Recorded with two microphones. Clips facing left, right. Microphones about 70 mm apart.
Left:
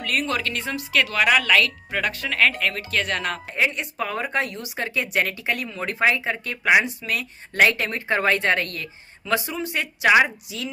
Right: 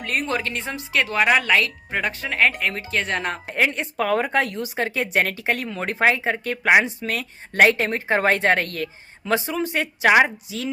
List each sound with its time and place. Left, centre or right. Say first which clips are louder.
0.0 s speech: even; right
3.4 s a woman's voice: right 2 dB; right
4.5 s a woman's voice: right 3 dB; right
5.5 s a woman's voice: right 2 dB; right
7.9 s a woman's voice: right 2 dB; right
8.7 s speech: right 5 dB; right
9.6 s a woman's voice: right 1 dB; right